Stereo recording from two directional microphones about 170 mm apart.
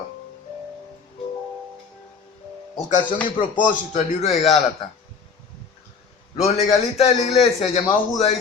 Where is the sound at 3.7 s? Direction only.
45° left (ahead or behind).